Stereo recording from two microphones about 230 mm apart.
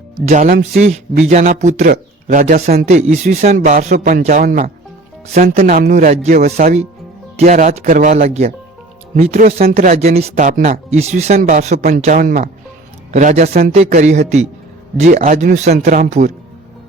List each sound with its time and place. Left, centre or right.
0.3 s a man's voice: right
5.3 s a man's voice: right